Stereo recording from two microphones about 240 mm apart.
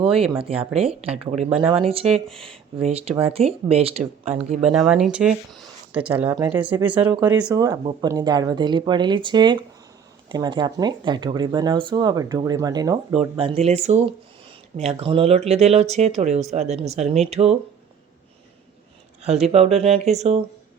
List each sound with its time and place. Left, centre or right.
0.0 s speech: right
2.3 s speech: centre
2.7 s speech: right
4.7 s speech: centre
7.5 s speech: centre
19.2 s speech: right